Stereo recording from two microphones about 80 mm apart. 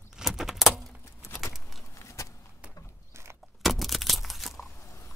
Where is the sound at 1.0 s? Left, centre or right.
Left.